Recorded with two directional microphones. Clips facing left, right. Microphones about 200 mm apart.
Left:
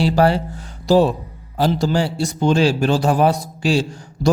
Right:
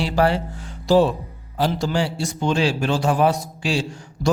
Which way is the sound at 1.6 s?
40° left (ahead or behind).